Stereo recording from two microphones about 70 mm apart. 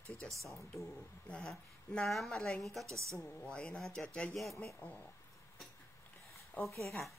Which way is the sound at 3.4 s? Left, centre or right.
Centre.